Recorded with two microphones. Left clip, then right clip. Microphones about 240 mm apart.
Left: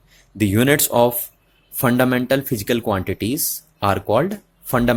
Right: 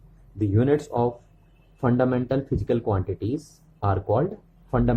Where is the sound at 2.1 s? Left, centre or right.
Left.